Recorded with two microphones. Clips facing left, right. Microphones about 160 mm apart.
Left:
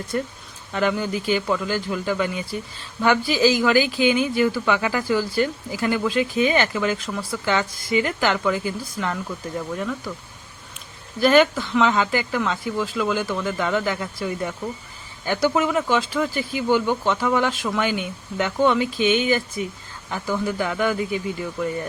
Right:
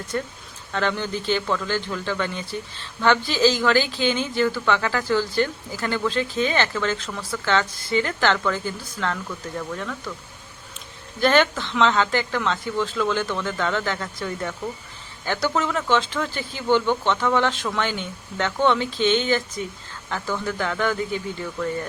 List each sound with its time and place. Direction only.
0.1 s a man's voice: 10° left (ahead or behind)
11.2 s a man's voice: 10° left (ahead or behind)